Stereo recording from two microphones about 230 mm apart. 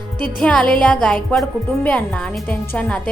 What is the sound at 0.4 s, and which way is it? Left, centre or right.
A woman's voice, centre.